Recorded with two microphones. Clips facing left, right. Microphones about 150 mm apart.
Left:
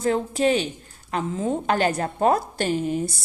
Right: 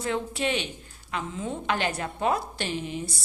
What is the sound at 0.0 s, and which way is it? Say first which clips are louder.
A woman's voice: left 7 dB; 40° left (ahead or behind).